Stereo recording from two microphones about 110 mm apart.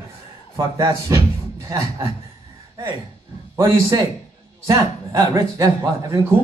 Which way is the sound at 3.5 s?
30° right (ahead or behind).